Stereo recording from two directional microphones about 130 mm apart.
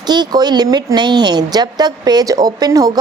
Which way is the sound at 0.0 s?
35° right (ahead or behind).